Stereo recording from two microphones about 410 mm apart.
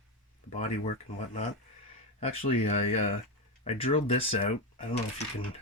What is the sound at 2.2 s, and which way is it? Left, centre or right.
Speech, centre.